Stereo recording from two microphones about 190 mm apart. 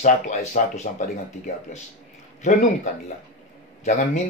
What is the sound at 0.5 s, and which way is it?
Speech, 40° left (ahead or behind).